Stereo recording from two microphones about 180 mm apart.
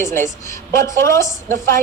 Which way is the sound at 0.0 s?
15° left (ahead or behind).